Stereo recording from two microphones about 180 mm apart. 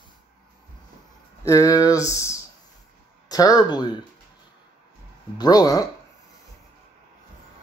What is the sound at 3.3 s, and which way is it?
Speech, 20° left (ahead or behind).